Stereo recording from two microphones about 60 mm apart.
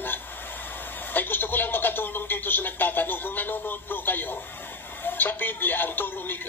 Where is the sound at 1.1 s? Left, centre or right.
Left.